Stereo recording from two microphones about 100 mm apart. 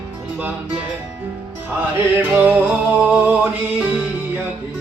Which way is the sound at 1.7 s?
20° right (ahead or behind).